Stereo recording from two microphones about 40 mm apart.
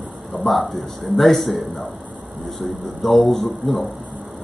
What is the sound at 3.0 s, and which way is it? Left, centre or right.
Speech, centre.